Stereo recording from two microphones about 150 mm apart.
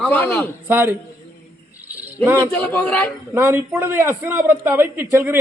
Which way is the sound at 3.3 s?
15° right (ahead or behind).